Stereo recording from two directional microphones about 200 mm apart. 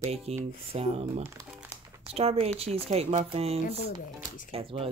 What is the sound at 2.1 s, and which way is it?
Speech, 30° right (ahead or behind).